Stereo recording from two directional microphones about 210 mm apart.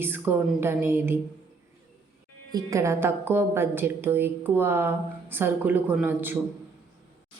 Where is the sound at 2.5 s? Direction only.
15° right (ahead or behind).